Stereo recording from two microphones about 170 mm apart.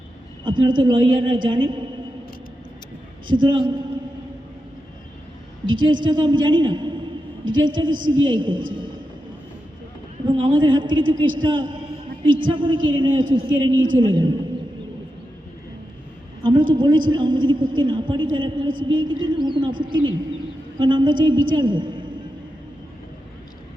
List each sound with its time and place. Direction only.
0.4 s a man's voice: 30° right (ahead or behind)
3.2 s a man's voice: 25° right (ahead or behind)
5.6 s a man's voice: 25° right (ahead or behind)
10.2 s a man's voice: 30° right (ahead or behind)
16.4 s a man's voice: 25° right (ahead or behind)